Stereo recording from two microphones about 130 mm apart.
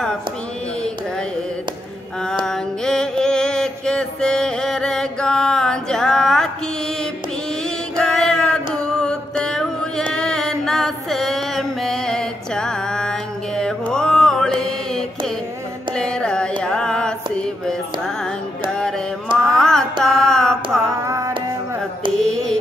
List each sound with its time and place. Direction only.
2.4 s mantra: 5° left (ahead or behind)
8.0 s a sound: 5° left (ahead or behind)
13.6 s mantra: 5° left (ahead or behind)
16.0 s a sound: 5° left (ahead or behind)
18.7 s music: 5° left (ahead or behind)
19.5 s carnatic music: 5° left (ahead or behind)
21.0 s music: 25° right (ahead or behind)
22.2 s mantra: 5° left (ahead or behind)